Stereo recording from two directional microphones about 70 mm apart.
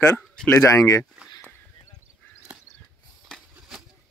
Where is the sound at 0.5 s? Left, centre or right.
Left.